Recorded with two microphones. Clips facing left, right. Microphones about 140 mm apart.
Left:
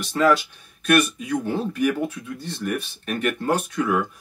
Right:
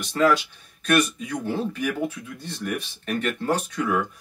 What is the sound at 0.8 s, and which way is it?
Speech, 5° left (ahead or behind).